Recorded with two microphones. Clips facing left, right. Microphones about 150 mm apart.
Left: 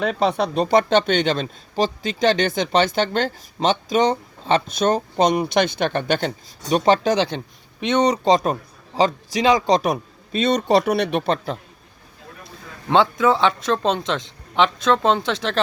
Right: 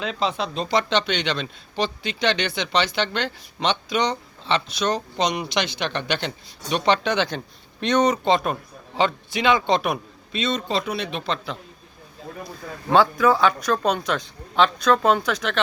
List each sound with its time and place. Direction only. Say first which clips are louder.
0.0 s speech: left 5 dB; 55° left (ahead or behind)
7.8 s speech: left 1 dB; 25° left (ahead or behind)
8.2 s a man's voice: left 3 dB; 35° left (ahead or behind)
10.4 s speech: left 7 dB; 70° left (ahead or behind)
12.9 s speech: left 1 dB; 20° left (ahead or behind)